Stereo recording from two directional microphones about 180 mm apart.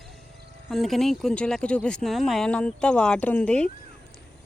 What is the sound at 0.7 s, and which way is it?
Speech, centre (ahead or behind).